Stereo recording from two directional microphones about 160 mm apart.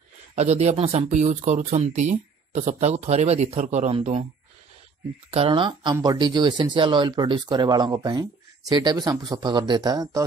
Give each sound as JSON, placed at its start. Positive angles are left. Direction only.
{"t": 0.4, "sound": "speech", "side_deg": -40}
{"t": 5.3, "sound": "speech", "side_deg": -35}